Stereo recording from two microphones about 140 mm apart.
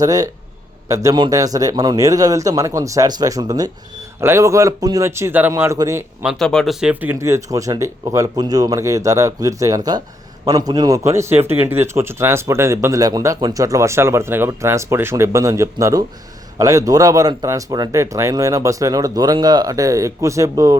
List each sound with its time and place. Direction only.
0.0 s a man's voice: 25° right (ahead or behind)
6.4 s a man's voice: 5° left (ahead or behind); by 20.7 s 25° right (ahead or behind)